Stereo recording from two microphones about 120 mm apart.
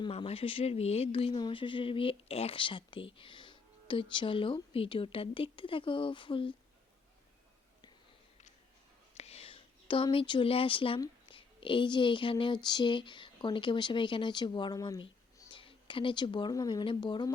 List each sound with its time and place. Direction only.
0.1 s speech: 55° left (ahead or behind)
9.1 s a sound: 60° left (ahead or behind)
11.3 s speech: 45° left (ahead or behind)
16.8 s speech: 45° left (ahead or behind)